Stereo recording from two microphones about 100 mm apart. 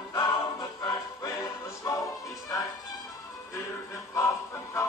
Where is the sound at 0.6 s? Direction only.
45° left (ahead or behind).